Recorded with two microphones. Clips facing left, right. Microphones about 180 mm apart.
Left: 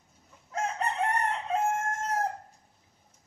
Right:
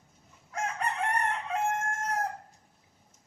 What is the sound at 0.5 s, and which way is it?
Chicken, 25° left (ahead or behind).